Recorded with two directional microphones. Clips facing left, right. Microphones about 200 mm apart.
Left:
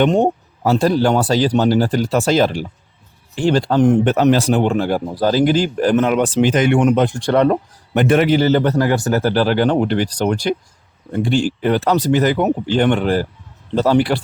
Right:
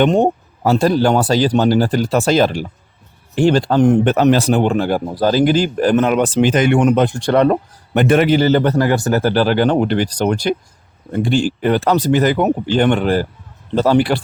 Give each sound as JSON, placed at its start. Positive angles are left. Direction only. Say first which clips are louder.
{"t": 0.0, "sound": "speech", "louder": "right 1 dB", "side_deg": -55}